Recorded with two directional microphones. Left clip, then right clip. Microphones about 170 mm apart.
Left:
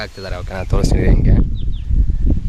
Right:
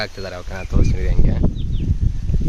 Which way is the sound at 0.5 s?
80° left.